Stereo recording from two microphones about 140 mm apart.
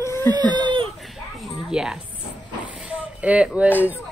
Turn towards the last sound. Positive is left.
turn(degrees=-10)  # may be behind; listen again after turning